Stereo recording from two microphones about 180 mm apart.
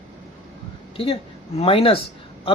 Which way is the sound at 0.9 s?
30° left (ahead or behind).